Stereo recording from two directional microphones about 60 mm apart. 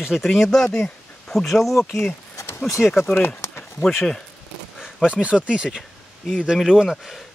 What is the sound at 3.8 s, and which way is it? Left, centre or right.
Speech, centre.